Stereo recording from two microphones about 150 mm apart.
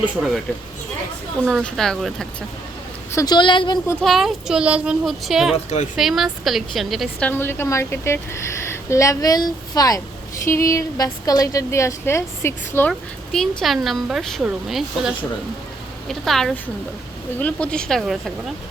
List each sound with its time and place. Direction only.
1.5 s speech: 5° left (ahead or behind)
3.2 s speech: 30° left (ahead or behind)
4.0 s speech: centre (ahead or behind)
7.3 s a woman's voice: 15° left (ahead or behind)
12.9 s a woman's voice: 5° left (ahead or behind)